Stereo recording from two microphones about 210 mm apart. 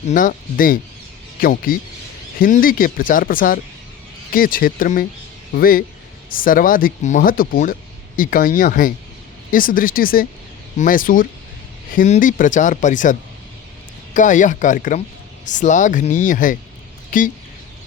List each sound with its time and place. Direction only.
0.1 s speech: 40° left (ahead or behind)